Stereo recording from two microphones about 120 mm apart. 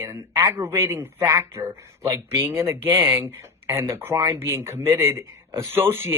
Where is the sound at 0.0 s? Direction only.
30° right (ahead or behind).